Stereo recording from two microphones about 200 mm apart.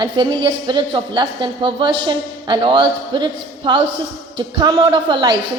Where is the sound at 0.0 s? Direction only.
20° right (ahead or behind).